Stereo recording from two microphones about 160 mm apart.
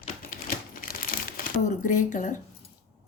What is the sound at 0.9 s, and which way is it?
Crumpling, 65° left (ahead or behind).